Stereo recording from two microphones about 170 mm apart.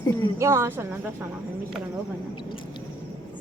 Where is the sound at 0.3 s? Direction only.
15° right (ahead or behind).